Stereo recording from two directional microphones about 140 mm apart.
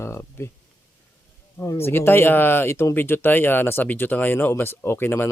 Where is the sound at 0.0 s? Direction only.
20° left (ahead or behind).